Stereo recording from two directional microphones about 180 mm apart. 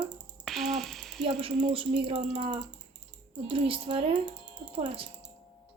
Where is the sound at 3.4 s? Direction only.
30° right (ahead or behind).